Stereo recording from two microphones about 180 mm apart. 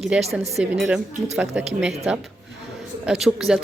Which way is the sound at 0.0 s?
Centre (ahead or behind).